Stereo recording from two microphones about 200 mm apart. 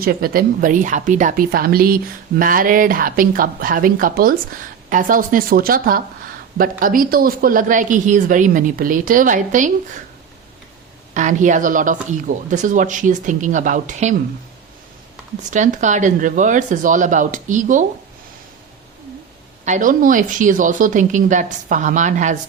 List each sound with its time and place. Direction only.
0.0 s a woman's voice: 50° right (ahead or behind)
11.1 s a woman's voice: 40° right (ahead or behind)
15.4 s a woman's voice: 40° right (ahead or behind)
19.6 s a woman's voice: 40° right (ahead or behind)